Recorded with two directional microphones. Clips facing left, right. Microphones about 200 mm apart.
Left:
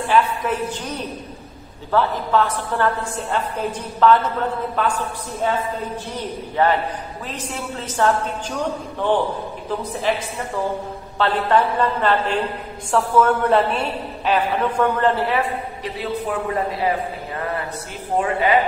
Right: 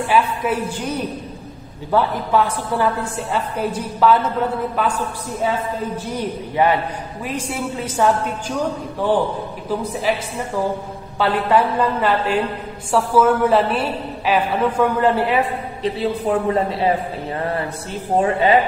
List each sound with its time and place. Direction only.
0.1 s a woman's voice: 10° right (ahead or behind)
10.1 s a woman's voice: 10° right (ahead or behind)
15.8 s a man's voice: 30° right (ahead or behind)
18.2 s a man's voice: 30° right (ahead or behind)